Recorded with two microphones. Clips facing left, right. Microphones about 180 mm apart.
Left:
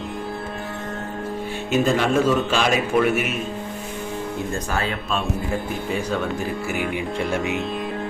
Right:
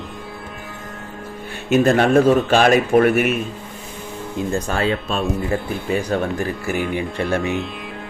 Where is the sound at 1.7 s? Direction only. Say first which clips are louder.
Right 5 dB; 60° right (ahead or behind).